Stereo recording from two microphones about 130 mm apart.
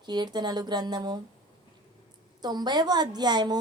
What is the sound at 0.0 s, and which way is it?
Speech, 35° right (ahead or behind).